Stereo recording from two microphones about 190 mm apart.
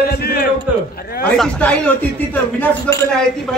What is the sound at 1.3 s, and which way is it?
A man's voice, 5° left (ahead or behind).